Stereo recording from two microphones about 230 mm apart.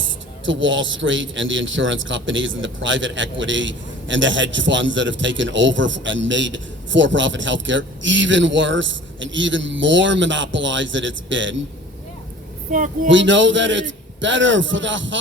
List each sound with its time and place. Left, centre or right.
0.4 s a man's voice: right
12.7 s speech: right
13.1 s a man's voice: right